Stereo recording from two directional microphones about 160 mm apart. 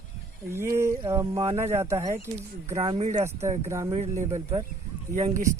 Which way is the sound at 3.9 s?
45° right (ahead or behind).